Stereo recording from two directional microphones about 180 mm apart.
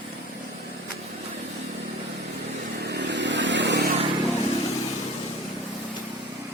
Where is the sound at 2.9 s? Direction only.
75° right (ahead or behind).